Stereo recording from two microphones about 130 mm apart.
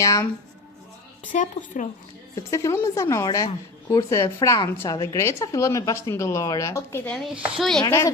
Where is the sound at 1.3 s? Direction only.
75° left (ahead or behind).